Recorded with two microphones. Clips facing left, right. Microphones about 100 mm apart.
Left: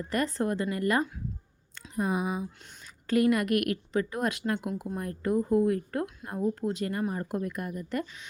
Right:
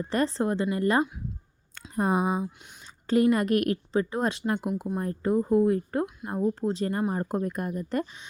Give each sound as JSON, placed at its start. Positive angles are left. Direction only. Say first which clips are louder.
{"t": 0.1, "sound": "speech", "louder": "right 2 dB", "side_deg": -30}
{"t": 2.0, "sound": "speech", "louder": "right 4 dB", "side_deg": -40}